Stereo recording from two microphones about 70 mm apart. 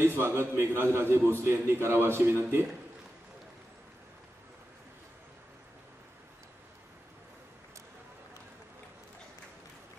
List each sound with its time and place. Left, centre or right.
0.0 s a man's voice: right